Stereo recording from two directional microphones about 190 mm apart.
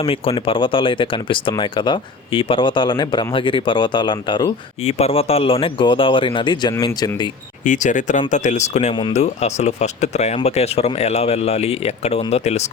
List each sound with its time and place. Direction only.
0.0 s speech: 30° left (ahead or behind)
7.6 s speech: 40° left (ahead or behind)